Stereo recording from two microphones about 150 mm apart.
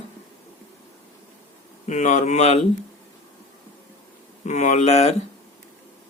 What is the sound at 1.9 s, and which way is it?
Speech, 55° left (ahead or behind).